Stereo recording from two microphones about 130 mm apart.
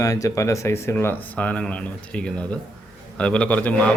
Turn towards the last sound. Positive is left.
turn(degrees=10)  # may be behind; listen again after turning